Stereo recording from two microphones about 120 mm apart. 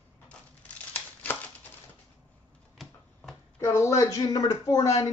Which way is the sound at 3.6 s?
20° left (ahead or behind).